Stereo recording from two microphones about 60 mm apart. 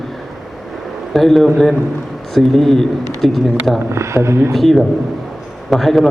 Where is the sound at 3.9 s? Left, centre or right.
Right.